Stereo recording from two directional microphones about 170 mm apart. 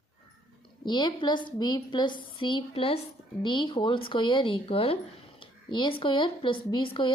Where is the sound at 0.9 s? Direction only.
25° left (ahead or behind).